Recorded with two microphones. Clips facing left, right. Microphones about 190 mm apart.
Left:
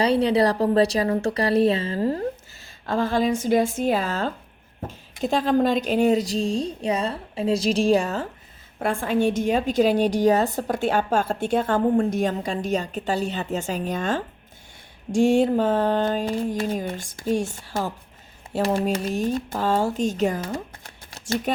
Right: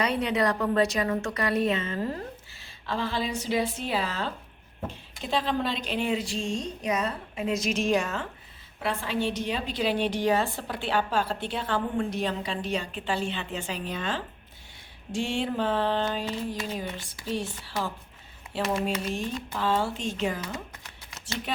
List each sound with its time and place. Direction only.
0.0 s a woman's voice: 30° left (ahead or behind)
2.6 s a woman's voice: 45° left (ahead or behind)
8.8 s a woman's voice: 50° left (ahead or behind)
18.5 s a woman's voice: 35° left (ahead or behind)
21.1 s shuffling cards: 40° left (ahead or behind)